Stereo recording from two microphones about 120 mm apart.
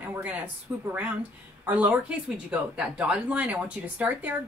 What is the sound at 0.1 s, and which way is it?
Speech, 15° right (ahead or behind).